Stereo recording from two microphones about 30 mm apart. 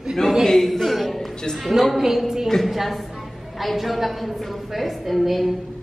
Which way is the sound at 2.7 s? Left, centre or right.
Centre.